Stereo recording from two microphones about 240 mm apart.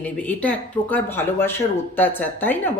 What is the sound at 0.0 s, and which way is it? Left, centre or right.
Speech, centre.